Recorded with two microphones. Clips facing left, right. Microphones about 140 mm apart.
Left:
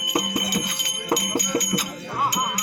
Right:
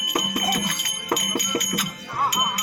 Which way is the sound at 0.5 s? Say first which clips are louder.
Even; 20° left (ahead or behind).